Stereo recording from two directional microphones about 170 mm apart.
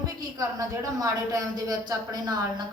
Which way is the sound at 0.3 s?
20° right (ahead or behind).